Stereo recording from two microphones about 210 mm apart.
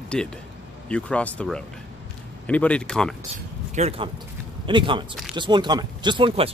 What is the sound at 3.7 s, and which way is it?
Speech, 30° right (ahead or behind).